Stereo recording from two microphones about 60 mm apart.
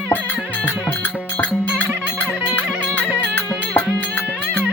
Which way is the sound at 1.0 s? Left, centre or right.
Left.